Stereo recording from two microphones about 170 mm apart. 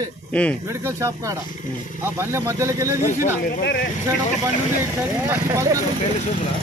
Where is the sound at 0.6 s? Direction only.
15° right (ahead or behind).